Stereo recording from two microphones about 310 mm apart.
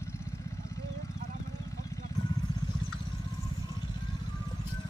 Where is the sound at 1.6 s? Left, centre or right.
Centre.